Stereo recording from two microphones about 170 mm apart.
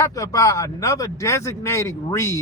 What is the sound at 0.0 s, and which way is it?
Speech, 20° left (ahead or behind).